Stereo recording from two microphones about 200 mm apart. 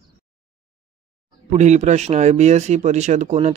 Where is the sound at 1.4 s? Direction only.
35° right (ahead or behind).